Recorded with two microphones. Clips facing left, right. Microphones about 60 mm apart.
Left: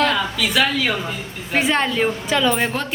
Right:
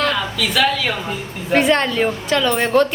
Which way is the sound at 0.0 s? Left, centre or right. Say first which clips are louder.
Left 1 dB; centre.